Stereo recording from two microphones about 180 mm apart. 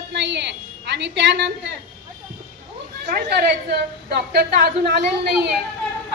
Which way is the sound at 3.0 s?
60° right (ahead or behind).